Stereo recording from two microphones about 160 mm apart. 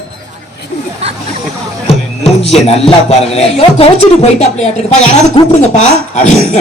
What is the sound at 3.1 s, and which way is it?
A man's voice, 40° left (ahead or behind).